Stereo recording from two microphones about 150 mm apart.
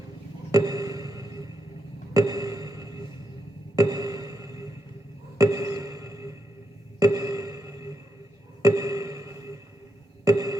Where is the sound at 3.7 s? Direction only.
25° right (ahead or behind).